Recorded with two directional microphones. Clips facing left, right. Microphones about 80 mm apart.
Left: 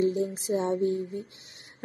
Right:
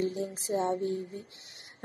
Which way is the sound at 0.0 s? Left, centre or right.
Left.